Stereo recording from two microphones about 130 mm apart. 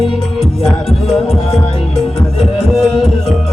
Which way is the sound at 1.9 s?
Centre (ahead or behind).